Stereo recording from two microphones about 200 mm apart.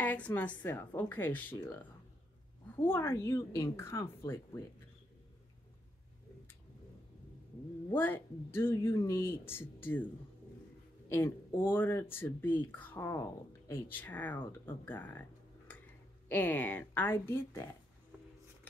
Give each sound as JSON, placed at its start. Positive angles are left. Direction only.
{"t": 0.0, "sound": "speech", "side_deg": 10}
{"t": 7.9, "sound": "speech", "side_deg": 10}
{"t": 11.1, "sound": "speech", "side_deg": 10}
{"t": 16.3, "sound": "speech", "side_deg": 10}